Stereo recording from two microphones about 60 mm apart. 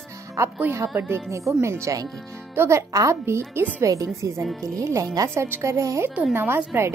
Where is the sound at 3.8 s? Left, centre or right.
Right.